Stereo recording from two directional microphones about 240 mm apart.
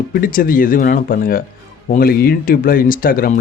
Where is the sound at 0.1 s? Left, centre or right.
Left.